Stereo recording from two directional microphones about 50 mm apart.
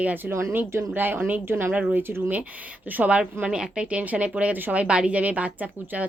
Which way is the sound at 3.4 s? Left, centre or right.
Centre.